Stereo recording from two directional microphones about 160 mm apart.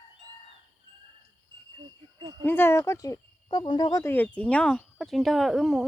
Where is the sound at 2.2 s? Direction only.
30° right (ahead or behind).